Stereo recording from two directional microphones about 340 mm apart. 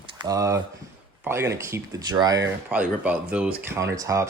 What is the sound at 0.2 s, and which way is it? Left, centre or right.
Speech, centre.